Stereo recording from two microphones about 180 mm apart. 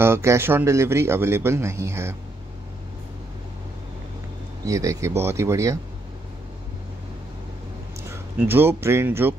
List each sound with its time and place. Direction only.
0.0 s a man's voice: 15° right (ahead or behind)
4.6 s a man's voice: 15° right (ahead or behind)
8.1 s speech: 10° right (ahead or behind)